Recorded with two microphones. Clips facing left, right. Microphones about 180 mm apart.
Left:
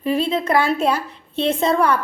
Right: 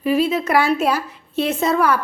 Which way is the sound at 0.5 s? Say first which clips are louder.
Right 1 dB; 5° right (ahead or behind).